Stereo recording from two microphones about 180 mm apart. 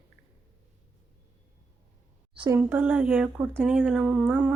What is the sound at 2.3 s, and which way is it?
Speech, 25° right (ahead or behind).